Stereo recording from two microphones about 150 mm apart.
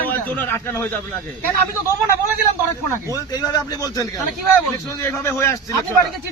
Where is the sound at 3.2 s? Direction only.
25° left (ahead or behind).